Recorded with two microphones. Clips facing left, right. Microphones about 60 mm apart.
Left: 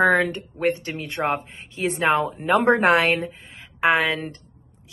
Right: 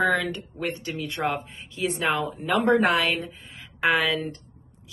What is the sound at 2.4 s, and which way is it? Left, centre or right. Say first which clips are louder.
A woman's voice: left 1 dB; left.